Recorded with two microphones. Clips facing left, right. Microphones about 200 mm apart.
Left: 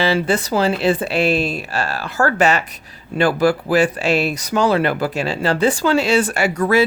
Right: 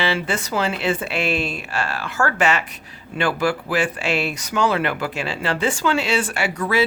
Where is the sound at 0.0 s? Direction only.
40° left (ahead or behind).